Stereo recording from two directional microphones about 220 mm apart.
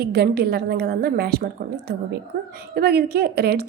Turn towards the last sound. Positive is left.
turn(degrees=-45)  # may be behind; listen again after turning